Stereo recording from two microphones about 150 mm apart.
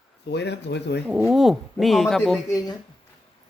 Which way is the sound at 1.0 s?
5° right (ahead or behind).